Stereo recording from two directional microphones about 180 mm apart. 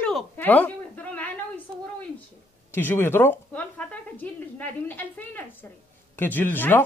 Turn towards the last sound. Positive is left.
turn(degrees=10)  # may be behind; listen again after turning